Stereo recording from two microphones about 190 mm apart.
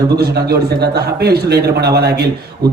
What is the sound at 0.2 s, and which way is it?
A man's voice, 55° right (ahead or behind).